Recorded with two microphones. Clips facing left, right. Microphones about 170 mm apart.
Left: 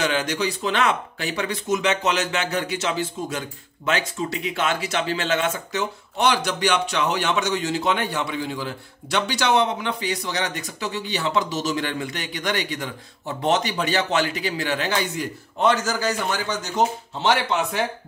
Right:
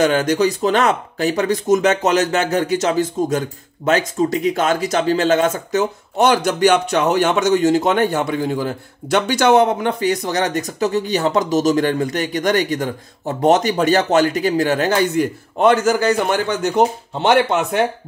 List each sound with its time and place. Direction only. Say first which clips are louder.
0.0 s speech: right 8 dB; 45° right (ahead or behind)